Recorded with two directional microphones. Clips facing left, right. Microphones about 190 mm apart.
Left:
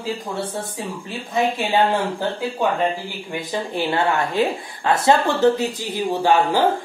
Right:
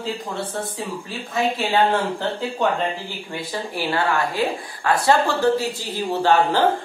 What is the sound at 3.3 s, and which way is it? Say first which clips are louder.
Speech: left 3 dB; 20° left (ahead or behind).